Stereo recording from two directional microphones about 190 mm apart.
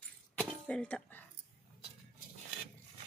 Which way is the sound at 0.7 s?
5° left (ahead or behind).